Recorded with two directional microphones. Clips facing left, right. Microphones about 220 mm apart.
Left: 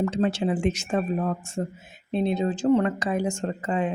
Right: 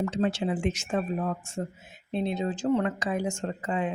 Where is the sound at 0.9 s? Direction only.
50° left (ahead or behind).